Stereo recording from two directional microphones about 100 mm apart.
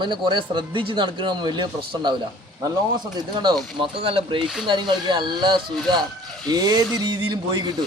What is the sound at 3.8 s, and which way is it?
A man's voice, 70° right (ahead or behind).